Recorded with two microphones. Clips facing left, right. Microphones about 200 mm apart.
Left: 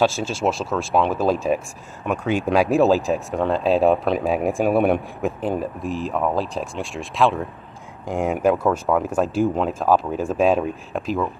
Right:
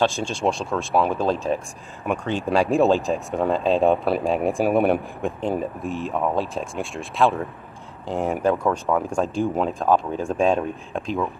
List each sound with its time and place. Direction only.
0.0 s speech: 5° left (ahead or behind)
1.1 s speech: 10° left (ahead or behind)